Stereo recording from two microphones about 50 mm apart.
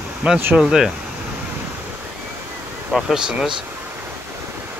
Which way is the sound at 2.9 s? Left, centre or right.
Centre.